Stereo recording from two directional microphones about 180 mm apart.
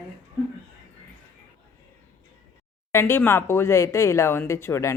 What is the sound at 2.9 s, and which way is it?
Speech, 15° left (ahead or behind).